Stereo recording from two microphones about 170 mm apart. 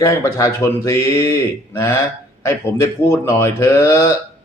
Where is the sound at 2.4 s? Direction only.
15° left (ahead or behind).